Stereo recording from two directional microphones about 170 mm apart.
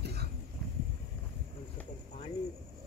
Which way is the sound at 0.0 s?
75° right (ahead or behind).